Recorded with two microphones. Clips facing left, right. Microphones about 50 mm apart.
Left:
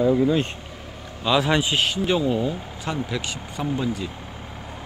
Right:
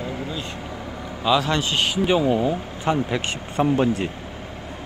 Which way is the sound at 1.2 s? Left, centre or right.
Centre.